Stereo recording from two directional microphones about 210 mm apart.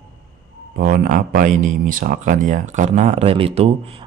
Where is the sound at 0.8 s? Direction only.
45° right (ahead or behind).